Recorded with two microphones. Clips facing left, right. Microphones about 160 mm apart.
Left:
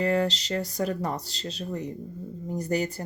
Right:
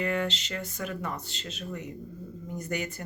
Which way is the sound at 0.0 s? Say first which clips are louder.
Left 5 dB; 35° left (ahead or behind).